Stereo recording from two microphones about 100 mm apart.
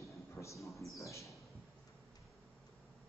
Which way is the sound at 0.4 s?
30° left (ahead or behind).